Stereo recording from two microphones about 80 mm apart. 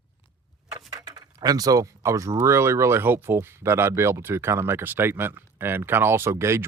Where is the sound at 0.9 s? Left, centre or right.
Right.